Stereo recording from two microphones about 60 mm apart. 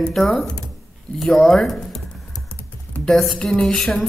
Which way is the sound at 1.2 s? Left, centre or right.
Centre.